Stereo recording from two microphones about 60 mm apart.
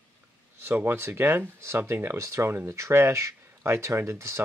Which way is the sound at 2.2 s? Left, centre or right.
Right.